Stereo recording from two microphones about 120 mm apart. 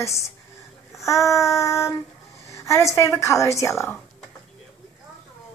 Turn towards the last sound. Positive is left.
turn(degrees=25)  # may be behind; listen again after turning